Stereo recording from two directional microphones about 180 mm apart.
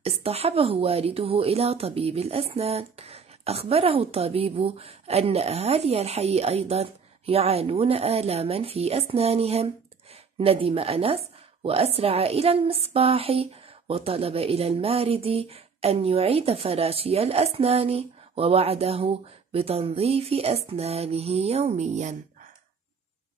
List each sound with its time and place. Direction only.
0.0 s a woman's voice: 35° right (ahead or behind)